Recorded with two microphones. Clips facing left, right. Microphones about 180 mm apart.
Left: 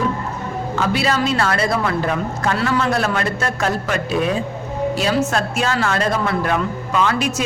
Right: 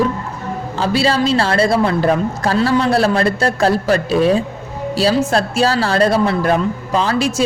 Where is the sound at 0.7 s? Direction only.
30° right (ahead or behind).